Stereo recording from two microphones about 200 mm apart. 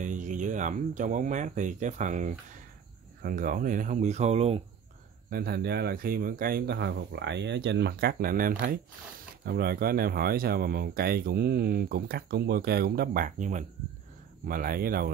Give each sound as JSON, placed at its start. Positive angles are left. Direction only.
{"t": 0.0, "sound": "speech", "side_deg": -40}
{"t": 5.3, "sound": "speech", "side_deg": -50}